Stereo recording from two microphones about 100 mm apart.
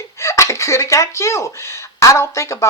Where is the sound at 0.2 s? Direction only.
30° left (ahead or behind).